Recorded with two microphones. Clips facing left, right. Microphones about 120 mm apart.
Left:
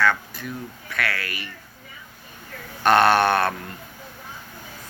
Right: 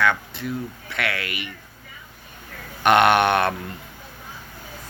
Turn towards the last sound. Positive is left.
turn(degrees=-20)  # may be behind; listen again after turning